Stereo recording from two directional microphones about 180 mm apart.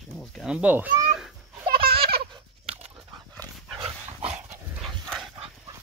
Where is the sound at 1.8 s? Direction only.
55° right (ahead or behind).